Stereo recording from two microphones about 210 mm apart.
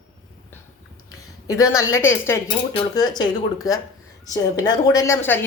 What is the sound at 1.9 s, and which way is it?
Speech, 10° left (ahead or behind).